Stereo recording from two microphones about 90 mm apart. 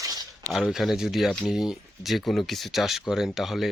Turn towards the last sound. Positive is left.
turn(degrees=0)  # may be behind; listen again after turning